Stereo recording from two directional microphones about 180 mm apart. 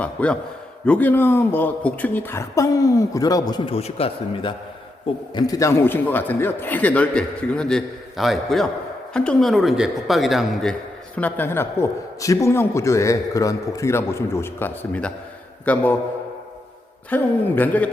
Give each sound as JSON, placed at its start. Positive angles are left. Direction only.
{"t": 0.0, "sound": "a man's voice", "side_deg": 5}
{"t": 3.8, "sound": "a man's voice", "side_deg": 35}
{"t": 5.3, "sound": "a man's voice", "side_deg": 20}
{"t": 17.1, "sound": "a man's voice", "side_deg": 10}